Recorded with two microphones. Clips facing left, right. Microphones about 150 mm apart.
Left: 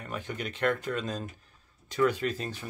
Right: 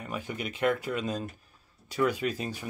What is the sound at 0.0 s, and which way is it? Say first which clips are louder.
Speech: right 1 dB; 10° right (ahead or behind).